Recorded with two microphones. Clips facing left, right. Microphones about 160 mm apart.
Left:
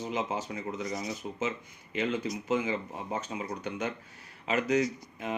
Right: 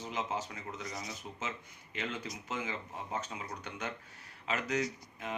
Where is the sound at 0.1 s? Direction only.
15° left (ahead or behind).